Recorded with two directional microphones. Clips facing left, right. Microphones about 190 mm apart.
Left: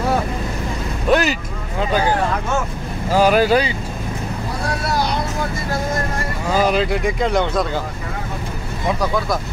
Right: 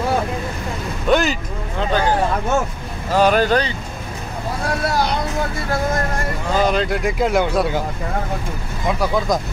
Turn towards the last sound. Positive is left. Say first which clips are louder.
# right 1 dB
turn(degrees=-10)  # may be behind; listen again after turning